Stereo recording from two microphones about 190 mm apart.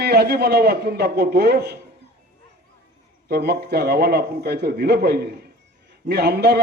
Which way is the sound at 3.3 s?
55° right (ahead or behind).